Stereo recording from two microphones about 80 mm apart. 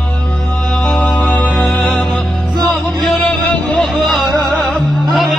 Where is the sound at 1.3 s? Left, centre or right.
Centre.